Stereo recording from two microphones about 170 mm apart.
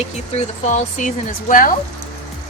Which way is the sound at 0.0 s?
40° left (ahead or behind).